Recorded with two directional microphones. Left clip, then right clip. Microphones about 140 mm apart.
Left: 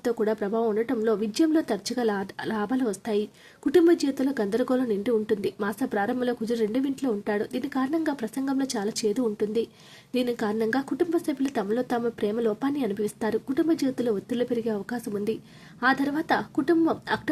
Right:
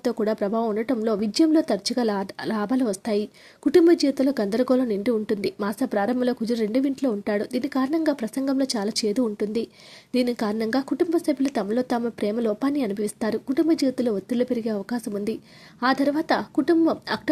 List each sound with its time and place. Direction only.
0.0 s speech: 20° right (ahead or behind)